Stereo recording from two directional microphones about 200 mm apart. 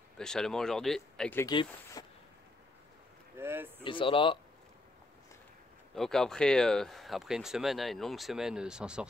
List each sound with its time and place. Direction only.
0.2 s speech: 5° left (ahead or behind)
1.4 s speech: 20° left (ahead or behind)
3.3 s speech: 10° right (ahead or behind)
3.8 s speech: 25° left (ahead or behind)
5.9 s speech: centre (ahead or behind)